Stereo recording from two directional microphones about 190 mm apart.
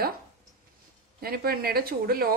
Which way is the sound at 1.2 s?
50° right (ahead or behind).